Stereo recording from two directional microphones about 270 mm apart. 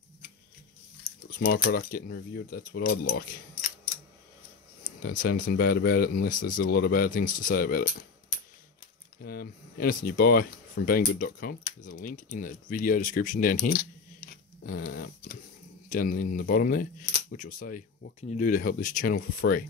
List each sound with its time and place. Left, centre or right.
1.4 s speech: left
5.2 s speech: left
9.2 s speech: left
14.9 s speech: left